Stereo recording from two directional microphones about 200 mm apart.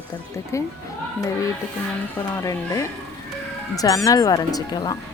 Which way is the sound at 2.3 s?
15° left (ahead or behind).